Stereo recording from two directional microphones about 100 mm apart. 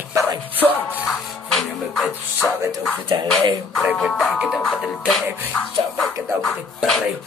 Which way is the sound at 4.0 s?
5° left (ahead or behind).